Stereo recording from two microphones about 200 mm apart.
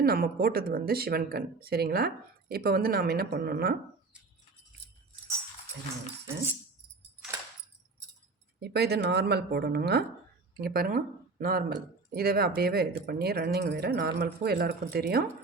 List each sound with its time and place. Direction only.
0.0 s speech: 50° right (ahead or behind)
8.6 s speech: 55° right (ahead or behind)